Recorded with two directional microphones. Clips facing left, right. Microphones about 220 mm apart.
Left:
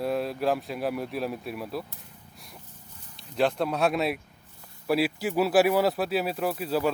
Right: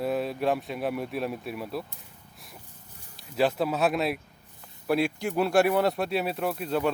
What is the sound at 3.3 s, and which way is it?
A man's voice, 5° right (ahead or behind).